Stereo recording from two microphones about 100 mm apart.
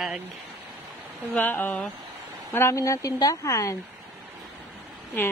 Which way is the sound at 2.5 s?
30° left (ahead or behind).